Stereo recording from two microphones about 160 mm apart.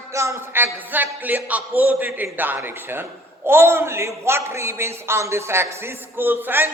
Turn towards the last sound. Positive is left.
turn(degrees=-15)  # may be behind; listen again after turning